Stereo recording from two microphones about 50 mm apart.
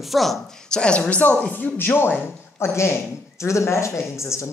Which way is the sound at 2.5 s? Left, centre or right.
Left.